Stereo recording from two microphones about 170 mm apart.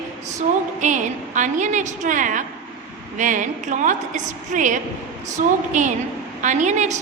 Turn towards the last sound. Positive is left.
turn(degrees=-45)  # may be behind; listen again after turning